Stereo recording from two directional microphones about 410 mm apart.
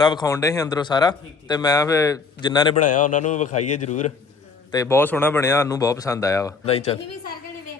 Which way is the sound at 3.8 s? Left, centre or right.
Centre.